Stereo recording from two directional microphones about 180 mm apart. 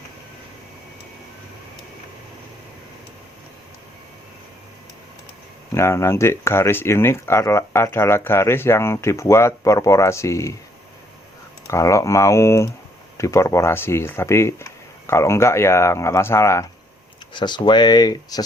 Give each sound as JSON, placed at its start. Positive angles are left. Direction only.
{"t": 5.7, "sound": "speech", "side_deg": 15}
{"t": 11.7, "sound": "speech", "side_deg": 15}